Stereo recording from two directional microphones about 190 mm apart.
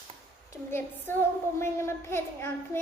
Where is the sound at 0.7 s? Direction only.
10° left (ahead or behind).